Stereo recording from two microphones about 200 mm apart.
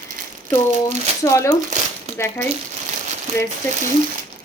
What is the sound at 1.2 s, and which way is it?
Speech, 15° left (ahead or behind).